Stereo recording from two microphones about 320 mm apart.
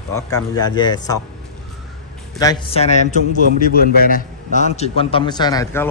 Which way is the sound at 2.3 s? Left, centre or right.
Centre.